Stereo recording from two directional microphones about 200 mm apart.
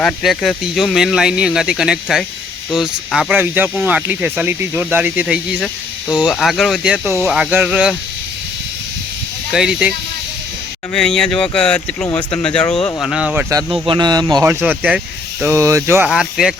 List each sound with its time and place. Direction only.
0.0 s speech: centre (ahead or behind)
9.5 s speech: 5° right (ahead or behind)
10.9 s speech: 5° left (ahead or behind)
13.0 s speech: 5° right (ahead or behind)
13.8 s speech: 20° right (ahead or behind)
16.0 s speech: 5° right (ahead or behind)